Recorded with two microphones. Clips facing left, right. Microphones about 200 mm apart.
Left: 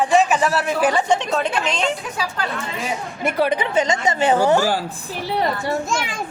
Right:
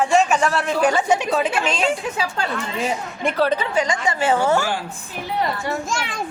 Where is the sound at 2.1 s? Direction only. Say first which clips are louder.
Right 1 dB; 25° right (ahead or behind).